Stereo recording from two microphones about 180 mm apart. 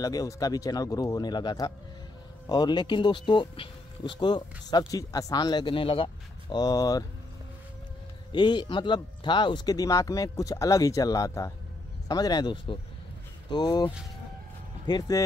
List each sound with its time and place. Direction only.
0.0 s speech: 20° left (ahead or behind)
8.3 s speech: 25° left (ahead or behind)